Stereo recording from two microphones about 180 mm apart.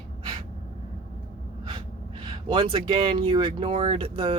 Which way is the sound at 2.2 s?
25° right (ahead or behind).